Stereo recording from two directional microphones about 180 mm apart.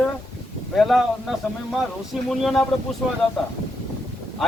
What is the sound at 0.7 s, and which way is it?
A man's voice, centre (ahead or behind).